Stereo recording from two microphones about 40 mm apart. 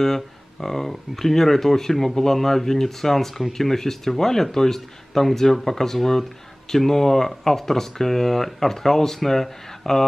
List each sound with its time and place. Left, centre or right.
0.0 s speech: centre